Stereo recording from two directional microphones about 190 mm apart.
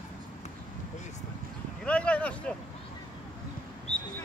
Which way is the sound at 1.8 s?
5° left (ahead or behind).